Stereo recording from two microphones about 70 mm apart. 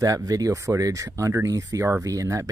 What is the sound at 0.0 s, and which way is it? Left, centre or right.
Speech, right.